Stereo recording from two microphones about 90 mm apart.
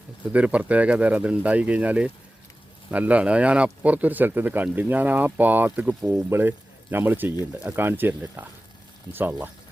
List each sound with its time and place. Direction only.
0.3 s speech: 15° right (ahead or behind)